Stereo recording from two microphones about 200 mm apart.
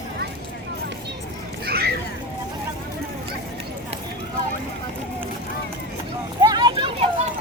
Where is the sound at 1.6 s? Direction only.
50° right (ahead or behind).